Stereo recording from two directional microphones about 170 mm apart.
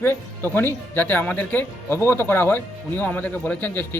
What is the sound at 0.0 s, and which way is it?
Speech, 15° left (ahead or behind).